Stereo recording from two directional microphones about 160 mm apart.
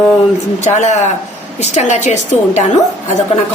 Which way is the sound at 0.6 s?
45° left (ahead or behind).